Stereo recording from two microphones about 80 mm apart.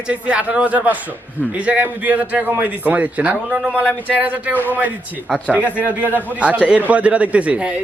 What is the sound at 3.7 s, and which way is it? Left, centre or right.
Speech, centre.